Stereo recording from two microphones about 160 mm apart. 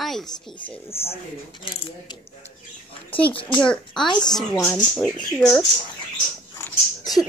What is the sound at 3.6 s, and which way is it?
Speech, 5° left (ahead or behind).